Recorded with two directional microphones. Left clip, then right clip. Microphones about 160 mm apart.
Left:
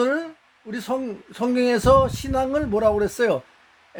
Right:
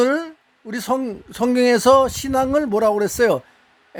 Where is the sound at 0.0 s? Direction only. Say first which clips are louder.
Right 4 dB; 45° right (ahead or behind).